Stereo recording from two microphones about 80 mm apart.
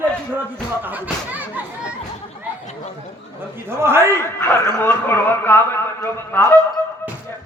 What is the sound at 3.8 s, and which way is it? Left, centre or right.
Speech, right.